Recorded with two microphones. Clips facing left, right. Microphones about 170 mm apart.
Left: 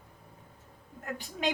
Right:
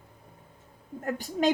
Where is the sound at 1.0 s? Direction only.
45° right (ahead or behind).